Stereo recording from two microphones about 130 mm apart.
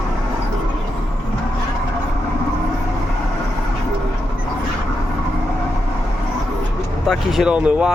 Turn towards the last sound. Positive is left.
turn(degrees=-10)  # may be behind; listen again after turning